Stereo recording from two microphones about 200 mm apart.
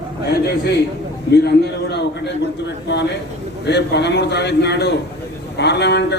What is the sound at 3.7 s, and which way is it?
A man's voice, 55° left (ahead or behind).